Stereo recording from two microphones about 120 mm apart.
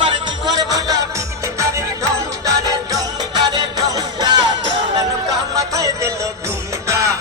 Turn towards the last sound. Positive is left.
turn(degrees=-30)  # may be behind; listen again after turning